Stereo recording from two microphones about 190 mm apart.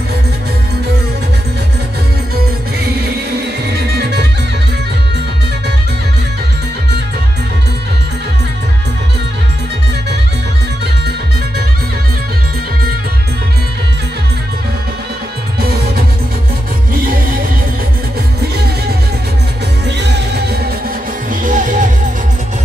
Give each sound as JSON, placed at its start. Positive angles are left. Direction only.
{"t": 3.9, "sound": "music", "side_deg": -60}
{"t": 20.0, "sound": "music", "side_deg": -60}
{"t": 21.3, "sound": "music", "side_deg": -45}